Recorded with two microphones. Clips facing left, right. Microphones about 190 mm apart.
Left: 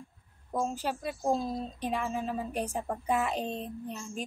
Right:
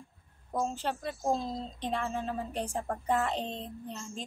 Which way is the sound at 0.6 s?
10° left (ahead or behind).